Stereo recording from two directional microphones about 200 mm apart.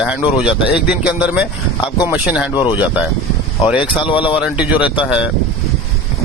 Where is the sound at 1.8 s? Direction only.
20° left (ahead or behind).